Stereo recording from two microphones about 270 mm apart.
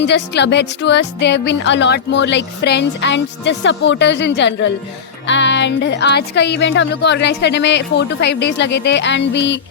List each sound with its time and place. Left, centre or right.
0.0 s speech: left